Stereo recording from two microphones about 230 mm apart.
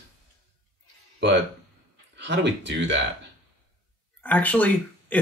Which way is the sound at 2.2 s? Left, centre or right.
Right.